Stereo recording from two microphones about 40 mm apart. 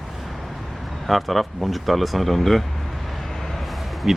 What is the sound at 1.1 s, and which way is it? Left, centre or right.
Speech, centre.